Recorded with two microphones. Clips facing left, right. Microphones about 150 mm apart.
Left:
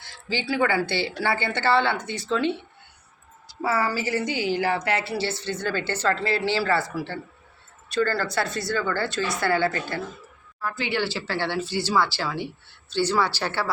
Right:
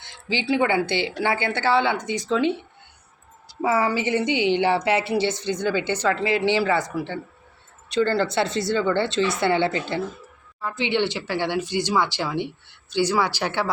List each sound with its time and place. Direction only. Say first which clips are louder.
0.0 s a woman's voice: right 2 dB; 20° right (ahead or behind)
3.6 s a woman's voice: right 3 dB; 20° right (ahead or behind)